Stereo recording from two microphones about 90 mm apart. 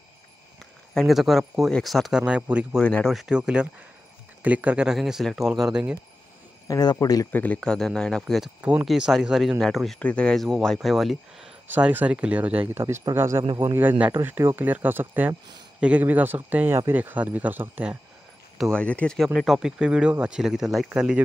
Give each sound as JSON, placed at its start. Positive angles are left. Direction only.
{"t": 0.9, "sound": "speech", "side_deg": 0}
{"t": 2.2, "sound": "speech", "side_deg": -15}
{"t": 2.8, "sound": "speech", "side_deg": 15}
{"t": 3.1, "sound": "speech", "side_deg": 0}
{"t": 3.3, "sound": "speech", "side_deg": -10}
{"t": 6.7, "sound": "speech", "side_deg": 45}
{"t": 7.3, "sound": "speech", "side_deg": 15}
{"t": 8.5, "sound": "speech", "side_deg": -15}
{"t": 11.9, "sound": "speech", "side_deg": -15}
{"t": 12.7, "sound": "speech", "side_deg": -30}
{"t": 18.7, "sound": "speech", "side_deg": 15}
{"t": 19.1, "sound": "speech", "side_deg": 5}